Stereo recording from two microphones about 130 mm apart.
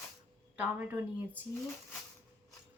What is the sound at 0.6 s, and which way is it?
Speech, 15° right (ahead or behind).